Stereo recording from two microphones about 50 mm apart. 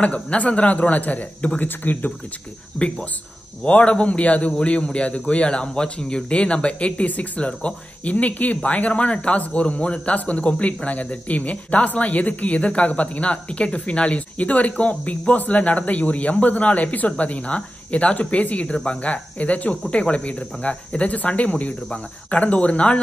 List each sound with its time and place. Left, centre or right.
0.0 s a man's voice: left
2.8 s speech: centre
3.6 s a man's voice: left
21.8 s a man's voice: centre